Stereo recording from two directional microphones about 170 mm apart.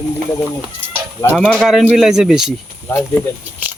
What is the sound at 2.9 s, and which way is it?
Speech, 10° left (ahead or behind).